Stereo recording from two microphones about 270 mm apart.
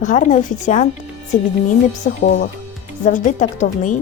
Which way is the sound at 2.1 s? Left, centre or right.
Left.